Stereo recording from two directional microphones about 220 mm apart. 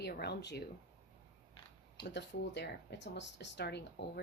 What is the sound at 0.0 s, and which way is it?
Speech, 50° left (ahead or behind).